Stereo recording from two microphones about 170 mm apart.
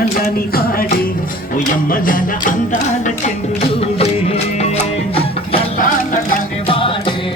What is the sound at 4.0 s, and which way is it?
Music, 40° left (ahead or behind).